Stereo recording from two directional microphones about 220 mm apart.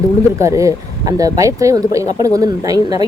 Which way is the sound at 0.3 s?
15° right (ahead or behind).